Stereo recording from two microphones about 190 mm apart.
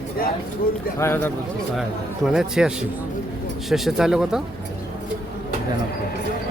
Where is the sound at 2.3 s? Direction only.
5° right (ahead or behind).